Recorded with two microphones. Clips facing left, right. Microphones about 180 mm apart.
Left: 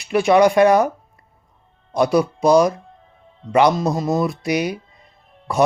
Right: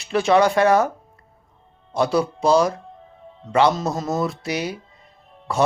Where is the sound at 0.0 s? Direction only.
15° left (ahead or behind).